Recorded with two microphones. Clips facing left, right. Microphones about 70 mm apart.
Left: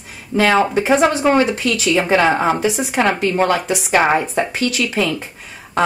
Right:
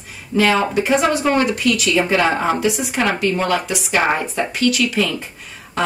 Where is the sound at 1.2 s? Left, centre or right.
Left.